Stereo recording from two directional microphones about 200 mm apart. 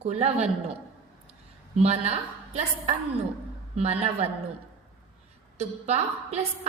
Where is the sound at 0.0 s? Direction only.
30° right (ahead or behind).